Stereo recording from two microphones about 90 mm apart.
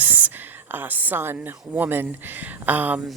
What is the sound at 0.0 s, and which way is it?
Speech, 20° right (ahead or behind).